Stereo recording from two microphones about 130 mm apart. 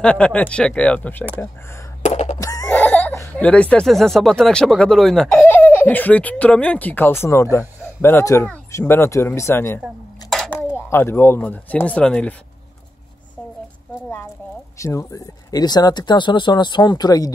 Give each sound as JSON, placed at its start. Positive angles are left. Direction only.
{"t": 0.0, "sound": "speech", "side_deg": 10}
{"t": 2.0, "sound": "wail", "side_deg": 65}
{"t": 2.3, "sound": "laughter", "side_deg": 30}
{"t": 2.7, "sound": "laughter", "side_deg": 10}
{"t": 3.2, "sound": "speech", "side_deg": 10}
{"t": 5.3, "sound": "speech", "side_deg": 15}
{"t": 14.8, "sound": "speech", "side_deg": 25}